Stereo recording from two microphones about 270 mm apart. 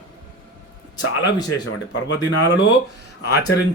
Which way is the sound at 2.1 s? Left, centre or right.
Left.